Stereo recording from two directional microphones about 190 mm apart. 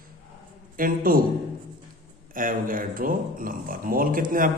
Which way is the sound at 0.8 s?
50° right (ahead or behind).